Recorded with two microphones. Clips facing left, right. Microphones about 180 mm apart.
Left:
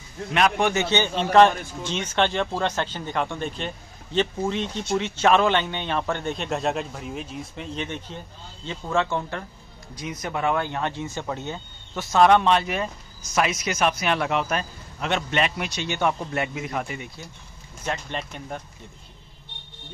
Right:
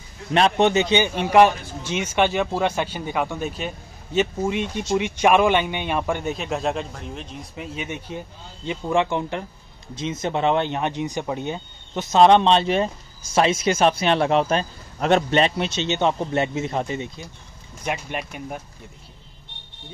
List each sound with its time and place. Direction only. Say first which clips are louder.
0.3 s a man's voice: right 4 dB; 25° right (ahead or behind); by 7.3 s 5° left (ahead or behind)
7.5 s a man's voice: right 2 dB; 5° right (ahead or behind); by 17.3 s 25° right (ahead or behind)
17.8 s a man's voice: right 2 dB; 10° right (ahead or behind)